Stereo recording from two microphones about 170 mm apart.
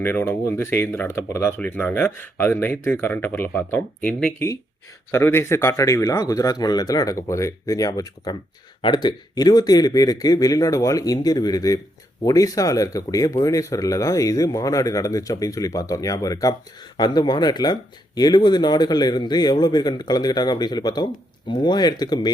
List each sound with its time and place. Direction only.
0.0 s speech: 15° left (ahead or behind)